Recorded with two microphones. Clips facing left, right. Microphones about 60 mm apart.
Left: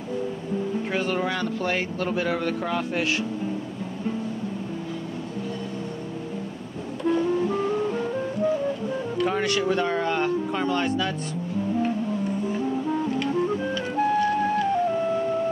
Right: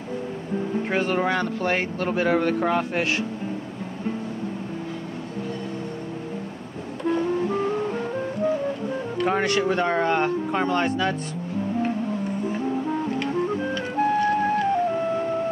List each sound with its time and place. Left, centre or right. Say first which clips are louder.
0.7 s speech: right 4 dB; right
7.1 s music: even; right
9.2 s speech: right 2 dB; right
13.0 s music: even; right